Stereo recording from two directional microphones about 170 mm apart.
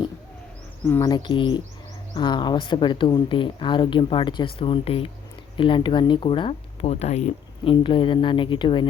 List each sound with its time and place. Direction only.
0.9 s speech: 20° left (ahead or behind)